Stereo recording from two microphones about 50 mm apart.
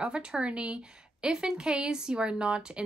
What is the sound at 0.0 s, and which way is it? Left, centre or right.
A woman's voice, right.